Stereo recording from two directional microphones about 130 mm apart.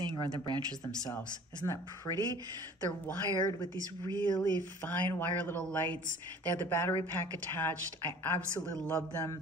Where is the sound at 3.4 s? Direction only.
30° left (ahead or behind).